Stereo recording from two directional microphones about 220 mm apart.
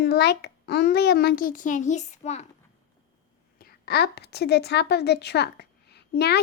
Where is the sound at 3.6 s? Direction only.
45° left (ahead or behind).